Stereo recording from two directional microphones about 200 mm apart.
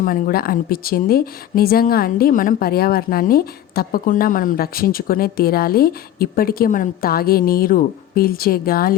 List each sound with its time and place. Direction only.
0.0 s a woman's voice: 45° left (ahead or behind)